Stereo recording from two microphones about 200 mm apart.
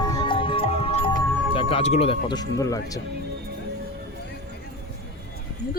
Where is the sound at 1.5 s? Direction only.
30° left (ahead or behind).